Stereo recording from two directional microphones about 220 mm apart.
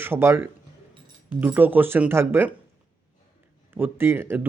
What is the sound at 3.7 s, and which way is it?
Speech, 10° right (ahead or behind).